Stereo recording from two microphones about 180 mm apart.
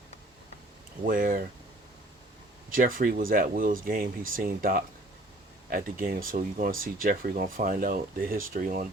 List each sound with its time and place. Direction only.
1.0 s speech: 50° right (ahead or behind)
2.6 s speech: 50° right (ahead or behind)